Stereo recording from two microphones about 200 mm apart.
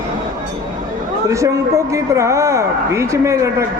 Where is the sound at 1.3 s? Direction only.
15° right (ahead or behind).